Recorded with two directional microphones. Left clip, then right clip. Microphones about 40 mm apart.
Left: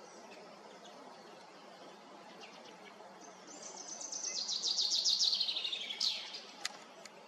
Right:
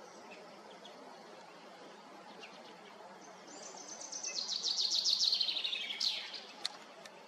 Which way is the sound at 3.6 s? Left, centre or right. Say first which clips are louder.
Left 2 dB; right.